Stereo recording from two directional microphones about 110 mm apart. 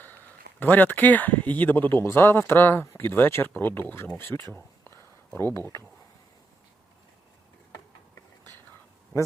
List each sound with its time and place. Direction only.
0.6 s speech: 15° left (ahead or behind)
4.5 s a sound: 25° left (ahead or behind)
5.5 s speech: 25° left (ahead or behind)